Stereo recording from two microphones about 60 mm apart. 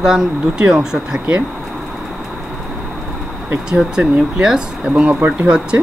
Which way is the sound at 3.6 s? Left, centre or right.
Centre.